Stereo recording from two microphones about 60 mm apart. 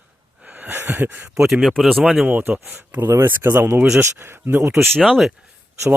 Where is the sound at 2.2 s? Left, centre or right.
Right.